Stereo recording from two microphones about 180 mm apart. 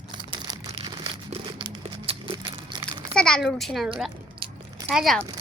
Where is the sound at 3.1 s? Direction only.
5° left (ahead or behind).